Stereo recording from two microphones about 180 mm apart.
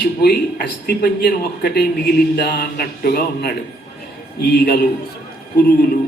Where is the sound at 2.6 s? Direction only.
55° left (ahead or behind).